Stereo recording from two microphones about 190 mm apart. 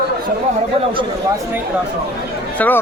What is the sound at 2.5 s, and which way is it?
Speech, 10° left (ahead or behind).